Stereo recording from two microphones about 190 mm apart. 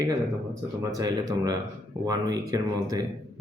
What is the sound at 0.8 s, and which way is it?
Speech, 20° right (ahead or behind).